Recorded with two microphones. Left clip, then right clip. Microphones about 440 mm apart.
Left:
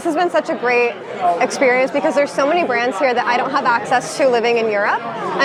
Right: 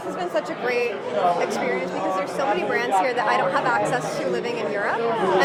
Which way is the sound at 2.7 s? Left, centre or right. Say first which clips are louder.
Left 4 dB; left.